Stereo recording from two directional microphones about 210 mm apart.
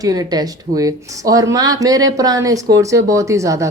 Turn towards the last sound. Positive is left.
turn(degrees=-15)  # may be behind; listen again after turning